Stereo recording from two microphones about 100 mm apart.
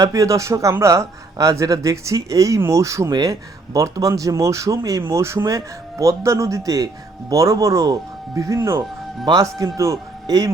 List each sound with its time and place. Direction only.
0.0 s a man's voice: 30° right (ahead or behind)